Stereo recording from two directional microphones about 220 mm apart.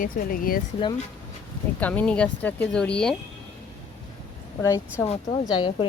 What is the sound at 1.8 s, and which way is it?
Speech, 5° left (ahead or behind).